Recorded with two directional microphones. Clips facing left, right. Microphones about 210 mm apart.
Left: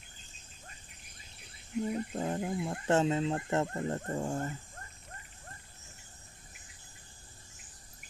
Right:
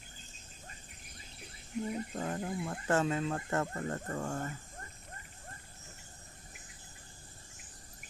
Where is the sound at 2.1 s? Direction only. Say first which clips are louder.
Left 3 dB; 20° left (ahead or behind).